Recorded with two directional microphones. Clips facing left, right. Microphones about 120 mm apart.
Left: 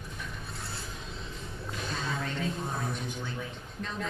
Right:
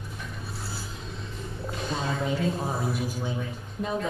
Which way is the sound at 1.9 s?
10° right (ahead or behind).